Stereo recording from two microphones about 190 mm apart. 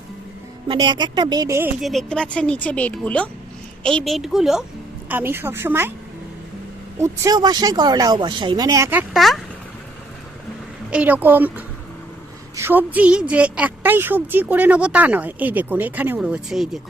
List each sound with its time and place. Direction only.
0.7 s speech: 25° right (ahead or behind)
1.8 s a woman's voice: centre (ahead or behind)
7.0 s speech: 15° right (ahead or behind)
9.1 s speech: centre (ahead or behind)
10.9 s a woman's voice: 10° right (ahead or behind)